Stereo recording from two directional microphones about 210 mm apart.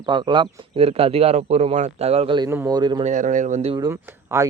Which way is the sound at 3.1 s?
35° right (ahead or behind).